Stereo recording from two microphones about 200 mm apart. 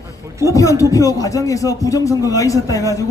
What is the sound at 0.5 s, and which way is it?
Speech, 15° left (ahead or behind).